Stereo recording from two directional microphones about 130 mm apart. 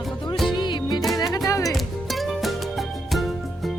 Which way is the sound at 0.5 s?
35° left (ahead or behind).